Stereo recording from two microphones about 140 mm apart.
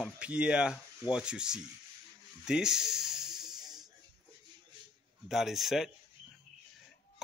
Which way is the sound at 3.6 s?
30° right (ahead or behind).